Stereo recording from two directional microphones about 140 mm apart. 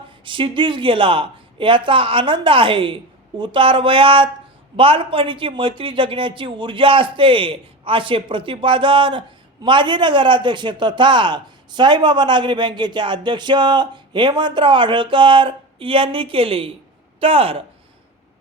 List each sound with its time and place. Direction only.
0.3 s speech: 35° right (ahead or behind)